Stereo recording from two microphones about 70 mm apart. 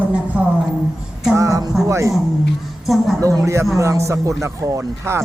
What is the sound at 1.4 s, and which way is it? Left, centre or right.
Speech, right.